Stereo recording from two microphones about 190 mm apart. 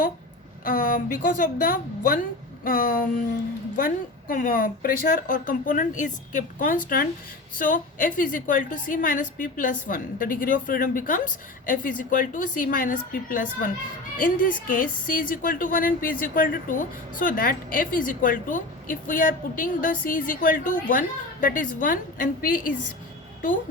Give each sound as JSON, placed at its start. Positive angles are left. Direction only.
{"t": 0.6, "sound": "a woman's voice", "side_deg": 45}